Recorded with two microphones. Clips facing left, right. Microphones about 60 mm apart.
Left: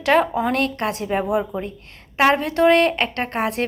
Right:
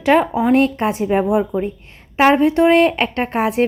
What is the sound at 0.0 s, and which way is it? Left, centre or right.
A woman's voice, centre.